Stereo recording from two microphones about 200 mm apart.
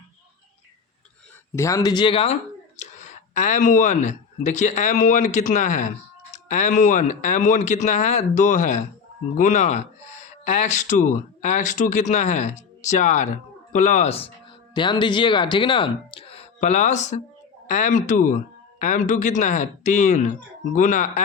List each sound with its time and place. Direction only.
1.5 s speech: 15° left (ahead or behind); by 21.1 s 40° left (ahead or behind)